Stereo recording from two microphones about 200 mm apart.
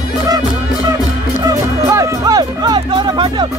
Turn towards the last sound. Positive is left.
turn(degrees=-25)  # may be behind; listen again after turning